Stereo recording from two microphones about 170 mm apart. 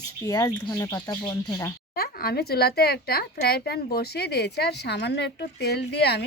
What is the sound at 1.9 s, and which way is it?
A woman's voice, 65° left (ahead or behind).